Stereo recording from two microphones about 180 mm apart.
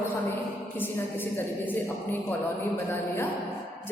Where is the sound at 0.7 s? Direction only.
10° left (ahead or behind).